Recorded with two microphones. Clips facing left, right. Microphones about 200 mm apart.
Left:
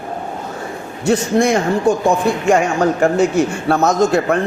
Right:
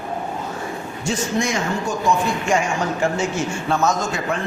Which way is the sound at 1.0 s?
60° left (ahead or behind).